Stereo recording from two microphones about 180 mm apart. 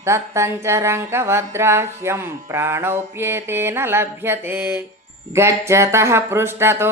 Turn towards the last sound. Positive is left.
turn(degrees=-15)  # may be behind; listen again after turning